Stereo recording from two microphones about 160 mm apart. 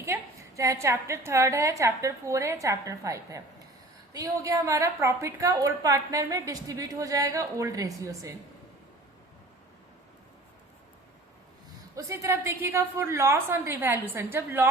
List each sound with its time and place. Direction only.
0.0 s a woman's voice: 20° right (ahead or behind)
11.9 s a woman's voice: 20° right (ahead or behind)